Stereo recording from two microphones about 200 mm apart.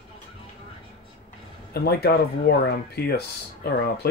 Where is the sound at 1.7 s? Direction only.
50° left (ahead or behind).